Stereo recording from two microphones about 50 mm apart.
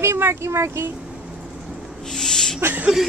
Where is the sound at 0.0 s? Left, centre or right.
Right.